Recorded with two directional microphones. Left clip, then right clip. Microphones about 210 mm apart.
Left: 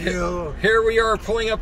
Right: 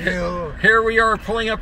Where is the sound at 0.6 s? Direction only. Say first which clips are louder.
Right 3 dB; 10° left (ahead or behind).